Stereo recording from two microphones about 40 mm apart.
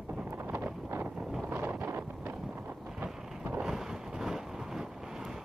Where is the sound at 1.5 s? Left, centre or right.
Right.